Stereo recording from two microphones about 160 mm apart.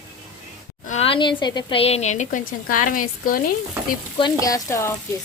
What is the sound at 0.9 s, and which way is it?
A woman's voice, 40° left (ahead or behind).